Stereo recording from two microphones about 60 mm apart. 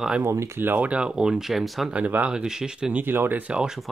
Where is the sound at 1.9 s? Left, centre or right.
Right.